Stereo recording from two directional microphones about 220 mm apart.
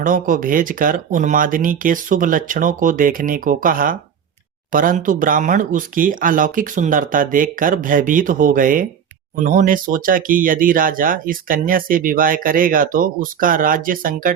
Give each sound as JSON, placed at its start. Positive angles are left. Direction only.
{"t": 0.0, "sound": "speech", "side_deg": -35}